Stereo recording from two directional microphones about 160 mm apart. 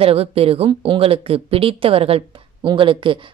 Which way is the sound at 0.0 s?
40° right (ahead or behind).